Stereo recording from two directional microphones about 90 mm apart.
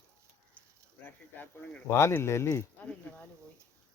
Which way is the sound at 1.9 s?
30° left (ahead or behind).